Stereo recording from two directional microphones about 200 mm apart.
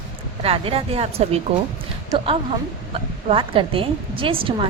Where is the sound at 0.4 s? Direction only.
30° right (ahead or behind).